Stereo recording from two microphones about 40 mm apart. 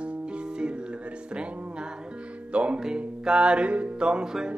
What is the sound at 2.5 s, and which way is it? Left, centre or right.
Music, right.